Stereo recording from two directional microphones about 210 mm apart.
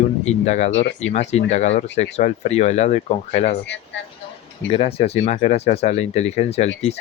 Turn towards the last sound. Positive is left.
turn(degrees=30)  # may be behind; listen again after turning